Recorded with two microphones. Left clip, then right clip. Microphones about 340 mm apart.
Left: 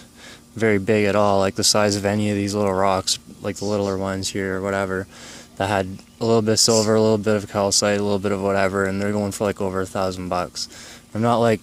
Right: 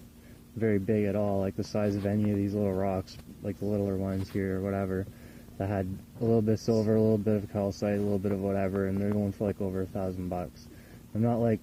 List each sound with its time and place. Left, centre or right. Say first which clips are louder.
0.6 s speech: left 10 dB; left